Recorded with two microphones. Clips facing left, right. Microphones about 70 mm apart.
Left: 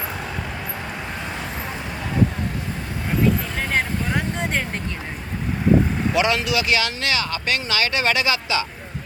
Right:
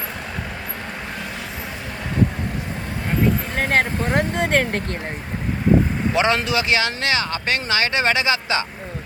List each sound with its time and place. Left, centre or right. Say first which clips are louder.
3.5 s vehicle: right 4 dB; right
6.1 s speech: right 1 dB; right